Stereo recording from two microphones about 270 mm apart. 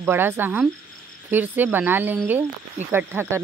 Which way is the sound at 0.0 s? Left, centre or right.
Centre.